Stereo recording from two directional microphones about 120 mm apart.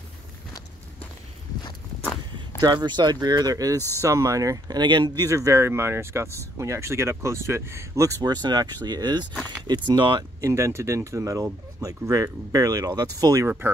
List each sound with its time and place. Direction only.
2.6 s speech: 40° right (ahead or behind)
5.3 s speech: 25° right (ahead or behind)
10.5 s speech: 25° right (ahead or behind)